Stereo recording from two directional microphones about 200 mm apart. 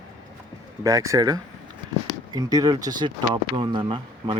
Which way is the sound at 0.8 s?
15° right (ahead or behind).